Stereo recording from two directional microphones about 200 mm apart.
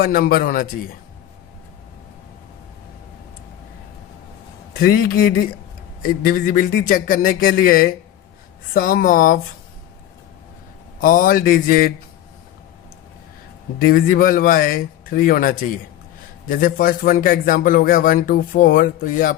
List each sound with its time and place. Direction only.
0.0 s speech: 50° left (ahead or behind)
4.7 s speech: 50° left (ahead or behind)
11.0 s speech: 45° left (ahead or behind)
13.7 s speech: 45° left (ahead or behind)